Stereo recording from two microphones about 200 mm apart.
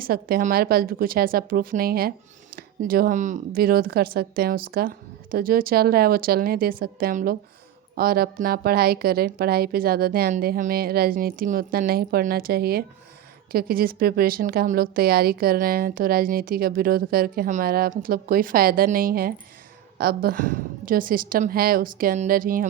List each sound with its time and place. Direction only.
0.0 s a woman's voice: 45° right (ahead or behind)